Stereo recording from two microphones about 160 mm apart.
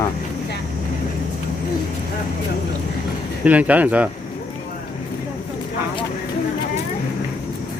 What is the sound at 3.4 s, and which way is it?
Speech, 10° right (ahead or behind).